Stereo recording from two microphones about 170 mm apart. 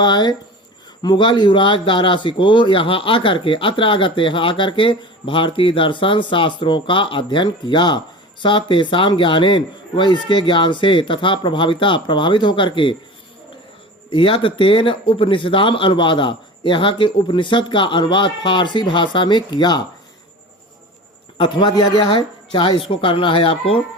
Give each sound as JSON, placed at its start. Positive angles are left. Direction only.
{"t": 0.0, "sound": "speech", "side_deg": 25}
{"t": 14.1, "sound": "speech", "side_deg": 30}
{"t": 21.3, "sound": "speech", "side_deg": 30}